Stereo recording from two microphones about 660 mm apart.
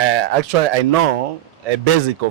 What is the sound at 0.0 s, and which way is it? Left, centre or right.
Speech, right.